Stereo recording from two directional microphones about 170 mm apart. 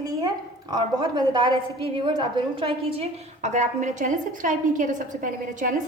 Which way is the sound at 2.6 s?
35° right (ahead or behind).